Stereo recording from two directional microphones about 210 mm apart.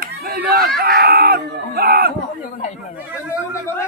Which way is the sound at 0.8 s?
45° right (ahead or behind).